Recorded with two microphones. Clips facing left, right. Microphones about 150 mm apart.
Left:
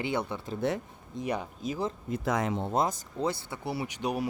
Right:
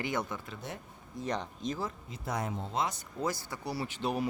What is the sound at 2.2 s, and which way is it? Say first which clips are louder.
Speech: left 5 dB; 90° left.